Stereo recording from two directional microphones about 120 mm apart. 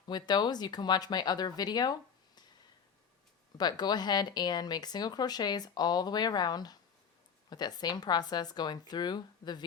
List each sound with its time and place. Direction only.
0.1 s speech: 35° left (ahead or behind)
3.6 s speech: 35° left (ahead or behind)